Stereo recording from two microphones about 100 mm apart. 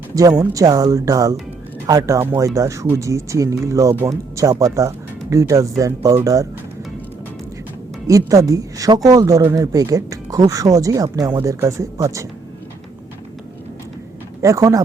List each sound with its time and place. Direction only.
0.2 s speech: 35° right (ahead or behind)
8.3 s speech: 35° right (ahead or behind)
14.4 s speech: 35° right (ahead or behind)